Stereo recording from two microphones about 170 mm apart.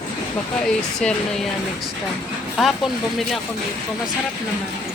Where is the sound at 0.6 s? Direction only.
5° left (ahead or behind).